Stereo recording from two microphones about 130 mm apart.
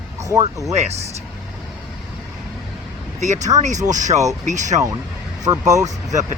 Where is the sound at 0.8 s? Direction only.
55° right (ahead or behind).